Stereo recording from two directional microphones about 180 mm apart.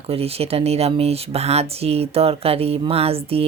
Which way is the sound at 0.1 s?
35° right (ahead or behind).